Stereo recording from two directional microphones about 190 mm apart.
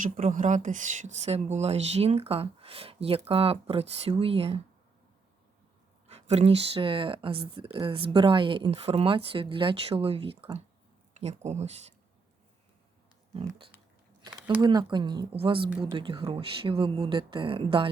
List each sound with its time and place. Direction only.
0.0 s speech: 40° right (ahead or behind)
6.1 s speech: 35° right (ahead or behind)
14.2 s a sound: 25° right (ahead or behind)
14.6 s speech: 20° right (ahead or behind)